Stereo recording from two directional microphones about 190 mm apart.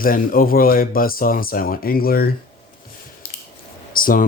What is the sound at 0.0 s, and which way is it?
A man's voice, 50° left (ahead or behind).